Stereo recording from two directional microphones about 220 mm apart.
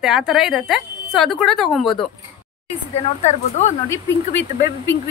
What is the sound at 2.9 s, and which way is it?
Speech, 30° left (ahead or behind).